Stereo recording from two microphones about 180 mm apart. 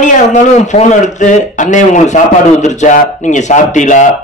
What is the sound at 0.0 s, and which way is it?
A man's voice, 40° left (ahead or behind).